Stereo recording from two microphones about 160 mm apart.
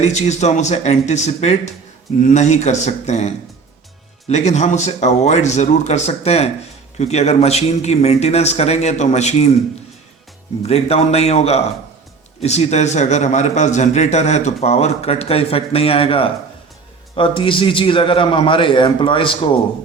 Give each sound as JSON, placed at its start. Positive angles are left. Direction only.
{"t": 0.0, "sound": "a man's voice", "side_deg": 45}
{"t": 10.6, "sound": "a man's voice", "side_deg": 40}